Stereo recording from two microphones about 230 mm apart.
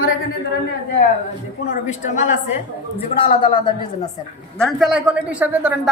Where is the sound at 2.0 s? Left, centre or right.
Left.